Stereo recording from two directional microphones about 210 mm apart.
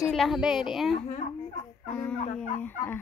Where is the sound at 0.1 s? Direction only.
Centre (ahead or behind).